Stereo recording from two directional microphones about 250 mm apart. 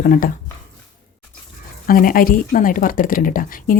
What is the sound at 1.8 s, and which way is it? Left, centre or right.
Speech, left.